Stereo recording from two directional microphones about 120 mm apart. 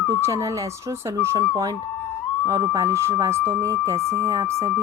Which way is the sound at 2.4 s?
30° right (ahead or behind).